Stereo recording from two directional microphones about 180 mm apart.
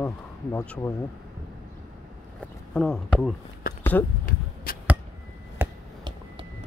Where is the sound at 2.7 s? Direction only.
Centre (ahead or behind).